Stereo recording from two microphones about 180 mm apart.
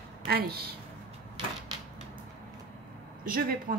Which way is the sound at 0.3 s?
60° right (ahead or behind).